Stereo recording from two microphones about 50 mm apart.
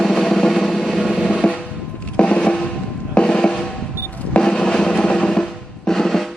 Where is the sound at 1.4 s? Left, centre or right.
Centre.